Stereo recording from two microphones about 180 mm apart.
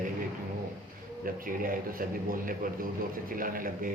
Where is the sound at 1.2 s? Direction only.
50° right (ahead or behind).